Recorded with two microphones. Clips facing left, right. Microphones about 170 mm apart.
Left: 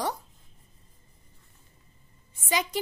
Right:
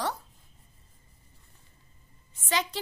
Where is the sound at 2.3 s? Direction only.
10° left (ahead or behind).